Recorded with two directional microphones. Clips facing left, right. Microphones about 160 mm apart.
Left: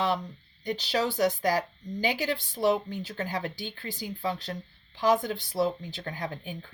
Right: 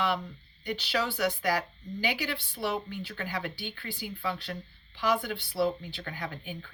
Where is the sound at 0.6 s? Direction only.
40° left (ahead or behind).